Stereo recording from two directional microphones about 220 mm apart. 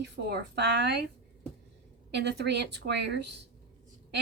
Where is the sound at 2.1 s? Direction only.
50° right (ahead or behind).